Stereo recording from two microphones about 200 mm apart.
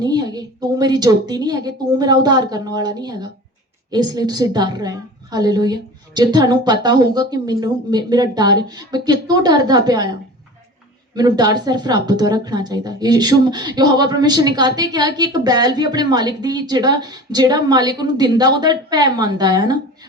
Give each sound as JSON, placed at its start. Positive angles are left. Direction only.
{"t": 0.0, "sound": "speech", "side_deg": -20}